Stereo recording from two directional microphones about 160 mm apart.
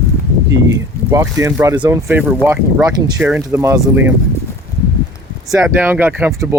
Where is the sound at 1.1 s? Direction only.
20° right (ahead or behind).